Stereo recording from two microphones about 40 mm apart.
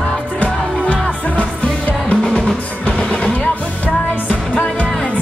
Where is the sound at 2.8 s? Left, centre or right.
Left.